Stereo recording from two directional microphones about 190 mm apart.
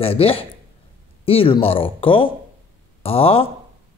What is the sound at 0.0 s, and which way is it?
A man's voice, 30° left (ahead or behind).